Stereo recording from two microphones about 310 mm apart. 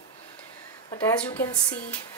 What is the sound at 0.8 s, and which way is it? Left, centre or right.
Speech, centre.